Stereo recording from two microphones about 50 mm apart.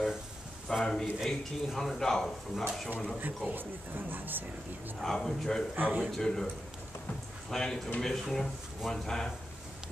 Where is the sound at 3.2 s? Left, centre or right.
Right.